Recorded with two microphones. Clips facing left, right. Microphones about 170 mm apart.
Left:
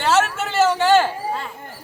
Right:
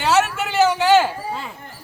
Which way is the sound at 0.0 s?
Centre (ahead or behind).